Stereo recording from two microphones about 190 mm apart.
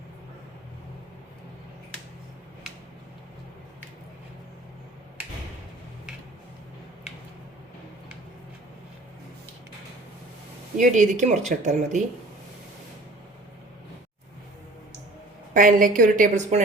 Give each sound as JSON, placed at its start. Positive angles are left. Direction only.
{"t": 10.8, "sound": "speech", "side_deg": -40}
{"t": 15.5, "sound": "a woman's voice", "side_deg": -45}